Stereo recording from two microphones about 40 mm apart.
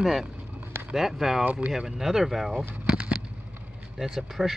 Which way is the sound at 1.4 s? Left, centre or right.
Right.